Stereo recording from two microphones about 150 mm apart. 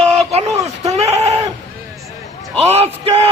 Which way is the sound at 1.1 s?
45° right (ahead or behind).